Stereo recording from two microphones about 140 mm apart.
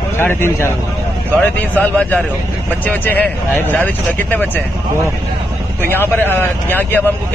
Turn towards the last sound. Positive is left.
turn(degrees=15)  # may be behind; listen again after turning